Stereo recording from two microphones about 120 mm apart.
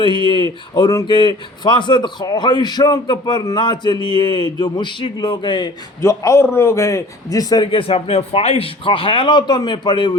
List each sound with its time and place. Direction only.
0.0 s a man's voice: 40° left (ahead or behind)
6.0 s a man's voice: 25° left (ahead or behind)
7.7 s a man's voice: 50° left (ahead or behind)